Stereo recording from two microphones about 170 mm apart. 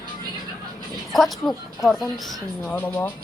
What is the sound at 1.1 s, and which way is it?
Speech, centre (ahead or behind).